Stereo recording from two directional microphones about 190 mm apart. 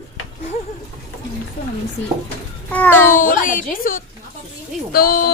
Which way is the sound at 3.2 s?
45° left (ahead or behind).